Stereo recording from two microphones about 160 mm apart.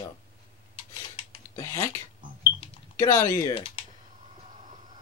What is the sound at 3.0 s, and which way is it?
Speech, 20° left (ahead or behind).